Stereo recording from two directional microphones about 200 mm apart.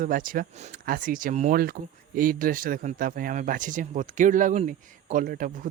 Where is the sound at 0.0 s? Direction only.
45° right (ahead or behind).